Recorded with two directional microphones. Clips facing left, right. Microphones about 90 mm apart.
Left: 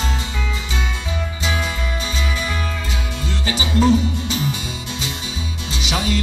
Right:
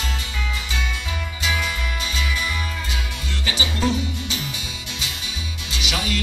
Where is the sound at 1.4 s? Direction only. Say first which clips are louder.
Left 1 dB; 35° left (ahead or behind).